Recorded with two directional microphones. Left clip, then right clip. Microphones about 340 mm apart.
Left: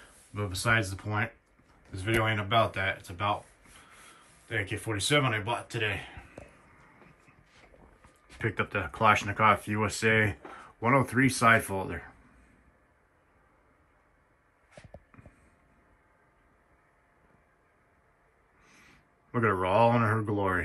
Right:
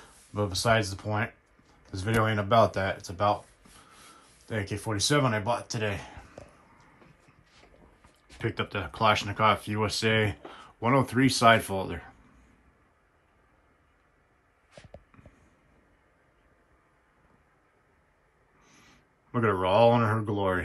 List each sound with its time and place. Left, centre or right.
0.3 s speech: centre
4.9 s speech: centre
8.0 s a sound: centre
8.7 s speech: centre
14.7 s a sound: centre
18.6 s speech: centre